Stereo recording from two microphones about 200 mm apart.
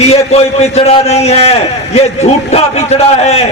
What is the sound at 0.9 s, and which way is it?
A man's voice, 30° left (ahead or behind).